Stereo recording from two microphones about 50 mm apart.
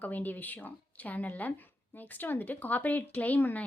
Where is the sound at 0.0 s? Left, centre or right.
Left.